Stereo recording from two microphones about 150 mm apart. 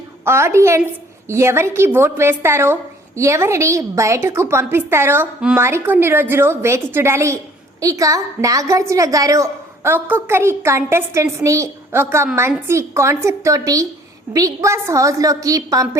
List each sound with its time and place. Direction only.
0.3 s a woman's voice: 20° right (ahead or behind)